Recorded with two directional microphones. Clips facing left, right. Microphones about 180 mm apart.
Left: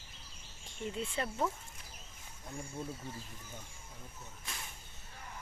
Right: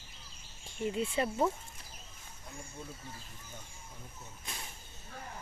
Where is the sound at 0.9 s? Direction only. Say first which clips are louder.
Right 5 dB; 10° right (ahead or behind).